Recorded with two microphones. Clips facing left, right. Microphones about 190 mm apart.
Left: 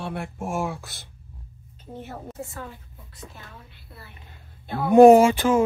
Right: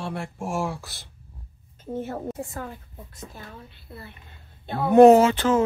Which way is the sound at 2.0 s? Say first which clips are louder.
Right 5 dB; 45° right (ahead or behind).